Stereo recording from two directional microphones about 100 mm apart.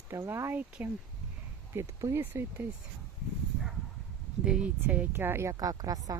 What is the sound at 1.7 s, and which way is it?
Speech, 30° right (ahead or behind).